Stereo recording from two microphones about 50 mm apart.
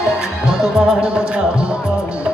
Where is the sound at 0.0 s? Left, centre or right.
Centre.